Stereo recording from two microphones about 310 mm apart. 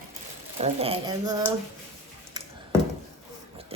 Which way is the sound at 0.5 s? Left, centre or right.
Centre.